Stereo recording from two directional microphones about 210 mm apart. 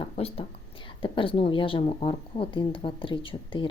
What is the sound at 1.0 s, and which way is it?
Speech, 25° left (ahead or behind).